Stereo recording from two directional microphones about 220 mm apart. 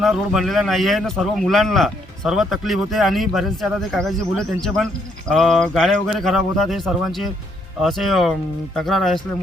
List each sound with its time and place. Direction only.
0.0 s a man's voice: centre (ahead or behind)